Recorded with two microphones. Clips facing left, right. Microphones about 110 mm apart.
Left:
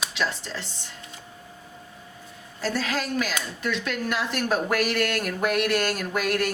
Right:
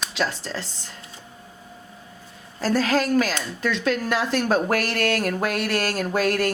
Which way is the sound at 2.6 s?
40° right (ahead or behind).